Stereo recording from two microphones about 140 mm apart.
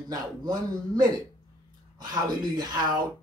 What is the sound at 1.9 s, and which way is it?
A man's voice, 30° right (ahead or behind).